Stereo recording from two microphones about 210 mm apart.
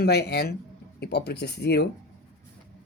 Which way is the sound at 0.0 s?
50° left (ahead or behind).